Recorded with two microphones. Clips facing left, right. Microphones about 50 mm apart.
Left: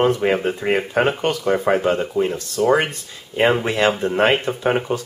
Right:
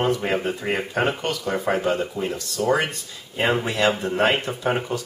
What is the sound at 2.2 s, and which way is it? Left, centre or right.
Speech, left.